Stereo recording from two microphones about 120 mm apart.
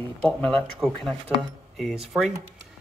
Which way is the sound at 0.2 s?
10° left (ahead or behind).